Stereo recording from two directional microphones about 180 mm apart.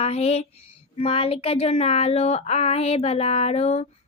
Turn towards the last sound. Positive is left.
turn(degrees=35)  # may be behind; listen again after turning